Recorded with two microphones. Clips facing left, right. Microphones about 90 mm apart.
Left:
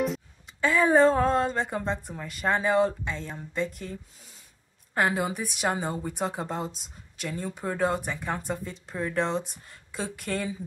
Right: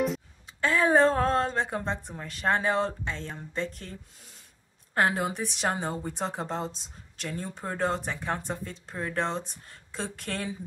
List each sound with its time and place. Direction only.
0.7 s a woman's voice: centre (ahead or behind)
5.0 s a woman's voice: 5° left (ahead or behind)
9.2 s a woman's voice: 10° left (ahead or behind)